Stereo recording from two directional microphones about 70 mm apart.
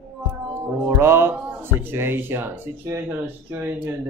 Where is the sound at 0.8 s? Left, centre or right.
Right.